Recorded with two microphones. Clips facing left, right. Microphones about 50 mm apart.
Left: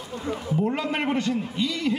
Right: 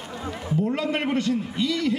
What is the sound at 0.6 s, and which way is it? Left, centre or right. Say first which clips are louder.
A man's voice: right 1 dB; left.